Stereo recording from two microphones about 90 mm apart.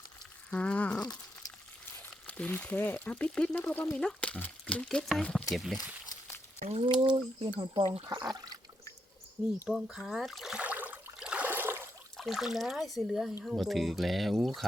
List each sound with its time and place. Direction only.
0.5 s a sound: 15° left (ahead or behind)
2.2 s speech: 15° left (ahead or behind); by 5.7 s centre (ahead or behind)
6.8 s speech: 65° right (ahead or behind)
8.0 s speech: 45° right (ahead or behind)
9.6 s speech: 5° right (ahead or behind)
10.6 s a sound: 15° right (ahead or behind)
11.2 s water: 10° right (ahead or behind)
11.4 s water: 25° right (ahead or behind)
12.1 s speech: centre (ahead or behind)